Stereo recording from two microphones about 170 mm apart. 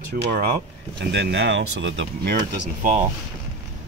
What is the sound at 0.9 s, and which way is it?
Speech, 75° right (ahead or behind).